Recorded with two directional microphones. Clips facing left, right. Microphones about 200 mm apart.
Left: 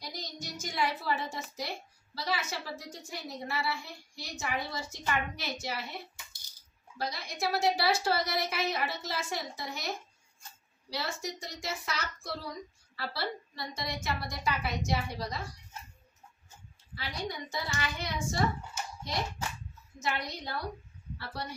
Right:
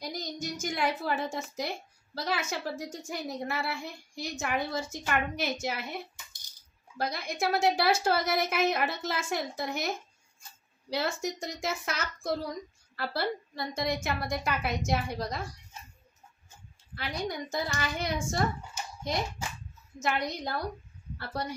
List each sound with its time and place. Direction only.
0.0 s a woman's voice: 50° right (ahead or behind)
7.0 s a woman's voice: 50° right (ahead or behind)
16.9 s a woman's voice: 50° right (ahead or behind)
20.0 s a woman's voice: 50° right (ahead or behind)